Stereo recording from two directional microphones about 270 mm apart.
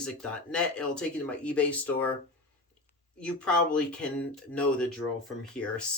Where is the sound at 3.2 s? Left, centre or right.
Centre.